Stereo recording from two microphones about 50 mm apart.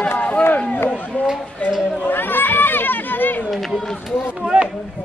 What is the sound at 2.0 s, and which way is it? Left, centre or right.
Run, left.